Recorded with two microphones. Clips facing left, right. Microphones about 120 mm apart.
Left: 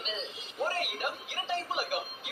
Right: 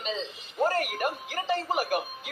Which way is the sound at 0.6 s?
45° right (ahead or behind).